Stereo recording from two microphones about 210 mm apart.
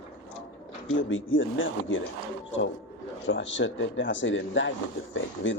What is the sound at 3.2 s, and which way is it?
Speech, 60° left (ahead or behind).